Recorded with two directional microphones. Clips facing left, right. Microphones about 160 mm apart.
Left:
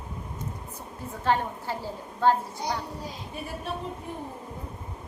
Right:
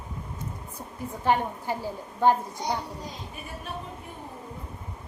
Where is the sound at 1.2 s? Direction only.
15° right (ahead or behind).